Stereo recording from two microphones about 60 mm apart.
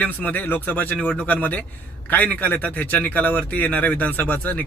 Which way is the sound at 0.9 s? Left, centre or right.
Centre.